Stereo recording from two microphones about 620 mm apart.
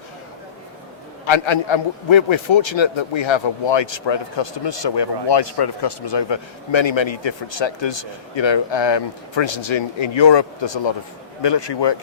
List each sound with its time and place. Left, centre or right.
1.2 s a man's voice: left